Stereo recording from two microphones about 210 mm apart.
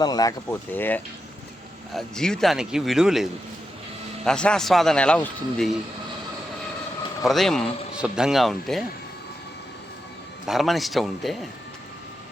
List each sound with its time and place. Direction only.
0.0 s speech: 15° left (ahead or behind); by 3.2 s centre (ahead or behind)
4.3 s speech: 5° left (ahead or behind)
7.2 s speech: centre (ahead or behind)
10.4 s speech: centre (ahead or behind)